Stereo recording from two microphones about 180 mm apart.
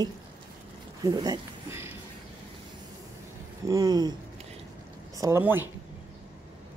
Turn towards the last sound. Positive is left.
turn(degrees=-15)  # may be behind; listen again after turning